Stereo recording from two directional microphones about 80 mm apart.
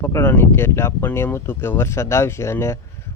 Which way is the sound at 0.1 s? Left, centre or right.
Left.